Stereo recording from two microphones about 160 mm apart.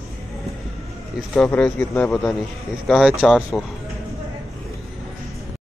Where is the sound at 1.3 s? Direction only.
5° left (ahead or behind).